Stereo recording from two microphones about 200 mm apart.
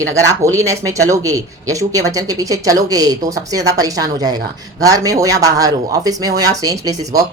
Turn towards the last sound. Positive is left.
turn(degrees=-15)  # may be behind; listen again after turning